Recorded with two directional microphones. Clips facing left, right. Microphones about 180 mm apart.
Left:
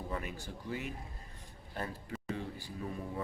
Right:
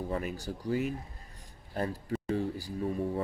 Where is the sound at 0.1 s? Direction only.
40° right (ahead or behind).